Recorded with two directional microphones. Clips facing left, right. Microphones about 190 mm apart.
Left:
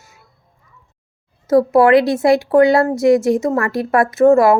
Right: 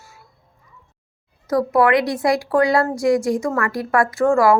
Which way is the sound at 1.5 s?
25° left (ahead or behind).